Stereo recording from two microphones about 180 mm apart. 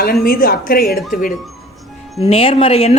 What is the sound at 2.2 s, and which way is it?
Speech, 30° left (ahead or behind).